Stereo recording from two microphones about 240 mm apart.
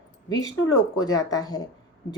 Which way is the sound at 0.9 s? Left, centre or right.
Centre.